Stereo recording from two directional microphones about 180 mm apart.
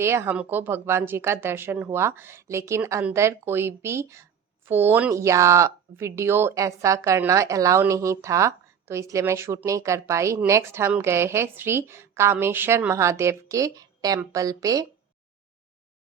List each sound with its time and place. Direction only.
0.0 s speech: 15° right (ahead or behind)